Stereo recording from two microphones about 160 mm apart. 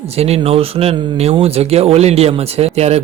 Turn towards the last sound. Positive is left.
turn(degrees=-40)  # may be behind; listen again after turning